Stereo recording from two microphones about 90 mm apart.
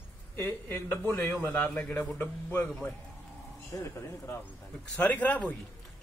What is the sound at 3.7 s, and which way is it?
Speech, 30° left (ahead or behind).